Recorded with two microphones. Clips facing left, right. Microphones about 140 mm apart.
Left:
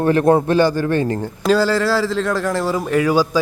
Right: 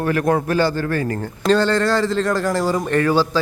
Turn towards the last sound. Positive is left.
turn(degrees=10)  # may be behind; listen again after turning